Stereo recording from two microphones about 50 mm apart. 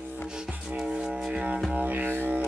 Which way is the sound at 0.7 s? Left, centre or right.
Centre.